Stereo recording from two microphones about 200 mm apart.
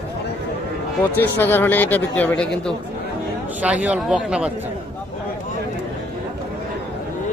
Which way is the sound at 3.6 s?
5° right (ahead or behind).